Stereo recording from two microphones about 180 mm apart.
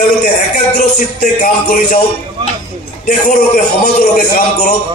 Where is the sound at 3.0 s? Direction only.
55° left (ahead or behind).